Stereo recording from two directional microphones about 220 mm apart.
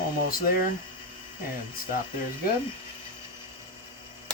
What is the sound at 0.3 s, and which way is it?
Speech, 40° left (ahead or behind).